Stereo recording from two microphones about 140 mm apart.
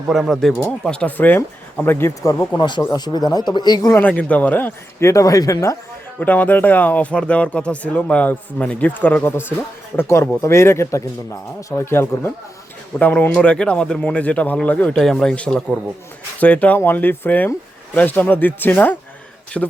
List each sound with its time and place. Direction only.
0.1 s speech: centre (ahead or behind)
2.6 s speech: 35° left (ahead or behind)
3.9 s speech: 10° left (ahead or behind)
6.1 s speech: 10° left (ahead or behind)